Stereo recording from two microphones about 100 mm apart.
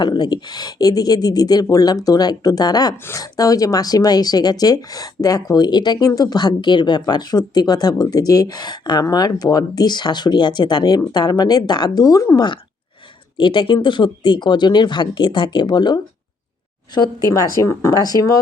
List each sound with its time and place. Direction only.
0.0 s speech: 45° left (ahead or behind)
13.3 s speech: 55° left (ahead or behind); by 18.3 s 40° left (ahead or behind)